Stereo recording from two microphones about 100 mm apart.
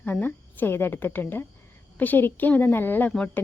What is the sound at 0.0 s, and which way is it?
Speech, 20° left (ahead or behind).